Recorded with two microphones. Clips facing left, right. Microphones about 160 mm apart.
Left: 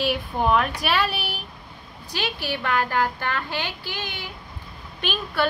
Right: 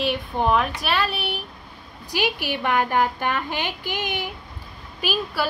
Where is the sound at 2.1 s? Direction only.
15° right (ahead or behind).